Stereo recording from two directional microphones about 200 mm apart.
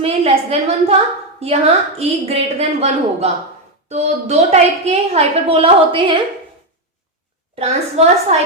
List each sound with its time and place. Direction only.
0.0 s a woman's voice: 30° right (ahead or behind)
7.5 s a woman's voice: 30° right (ahead or behind)